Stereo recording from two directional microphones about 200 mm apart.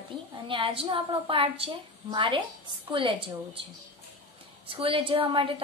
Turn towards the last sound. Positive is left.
turn(degrees=-25)  # may be behind; listen again after turning